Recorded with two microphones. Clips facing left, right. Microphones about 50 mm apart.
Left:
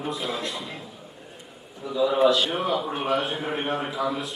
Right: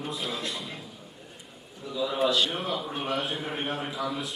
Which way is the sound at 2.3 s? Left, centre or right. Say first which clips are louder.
Left 4 dB; centre.